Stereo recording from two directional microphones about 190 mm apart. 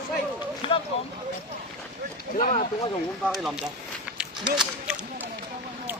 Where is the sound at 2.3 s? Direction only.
40° left (ahead or behind).